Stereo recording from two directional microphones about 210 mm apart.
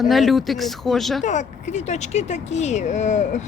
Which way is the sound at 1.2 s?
35° left (ahead or behind).